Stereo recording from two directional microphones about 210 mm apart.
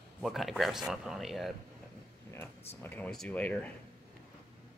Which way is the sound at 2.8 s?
5° left (ahead or behind).